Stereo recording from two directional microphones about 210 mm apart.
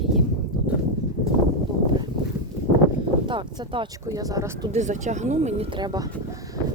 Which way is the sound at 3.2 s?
20° right (ahead or behind).